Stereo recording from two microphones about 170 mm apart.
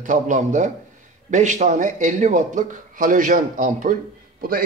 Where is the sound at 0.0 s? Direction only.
45° right (ahead or behind).